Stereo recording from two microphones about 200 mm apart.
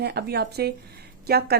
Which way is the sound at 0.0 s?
55° right (ahead or behind).